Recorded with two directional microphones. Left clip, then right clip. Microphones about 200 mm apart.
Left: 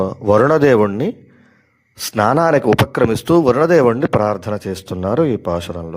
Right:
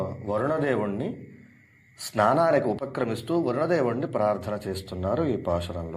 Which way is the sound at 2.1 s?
45° left (ahead or behind).